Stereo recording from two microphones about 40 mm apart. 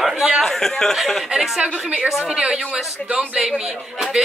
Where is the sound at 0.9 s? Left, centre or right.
Centre.